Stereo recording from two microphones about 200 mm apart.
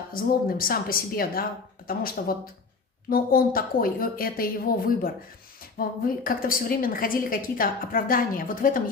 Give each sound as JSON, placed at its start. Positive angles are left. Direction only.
{"t": 0.1, "sound": "a woman's voice", "side_deg": 45}